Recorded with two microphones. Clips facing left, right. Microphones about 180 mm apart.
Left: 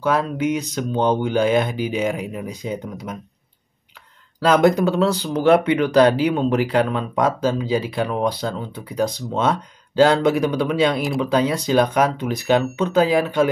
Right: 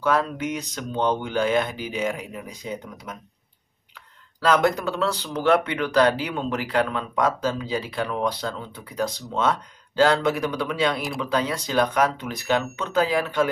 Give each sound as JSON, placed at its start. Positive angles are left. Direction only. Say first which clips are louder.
{"t": 0.0, "sound": "speech", "louder": "left 3 dB", "side_deg": 5}
{"t": 4.4, "sound": "speech", "louder": "left 5 dB", "side_deg": 15}